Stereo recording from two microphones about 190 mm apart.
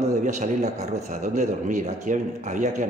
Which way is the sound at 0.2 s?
40° right (ahead or behind).